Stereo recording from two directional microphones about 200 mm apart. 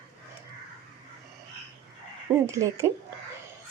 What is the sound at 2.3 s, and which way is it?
Speech, 15° right (ahead or behind).